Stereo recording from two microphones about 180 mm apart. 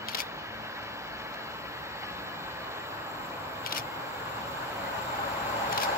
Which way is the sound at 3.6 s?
55° left (ahead or behind).